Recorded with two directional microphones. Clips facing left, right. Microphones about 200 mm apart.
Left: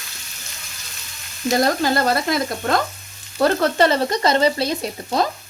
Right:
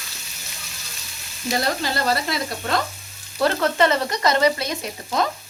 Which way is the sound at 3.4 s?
35° left (ahead or behind).